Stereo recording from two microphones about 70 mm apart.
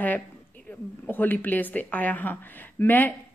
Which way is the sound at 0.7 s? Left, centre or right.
Left.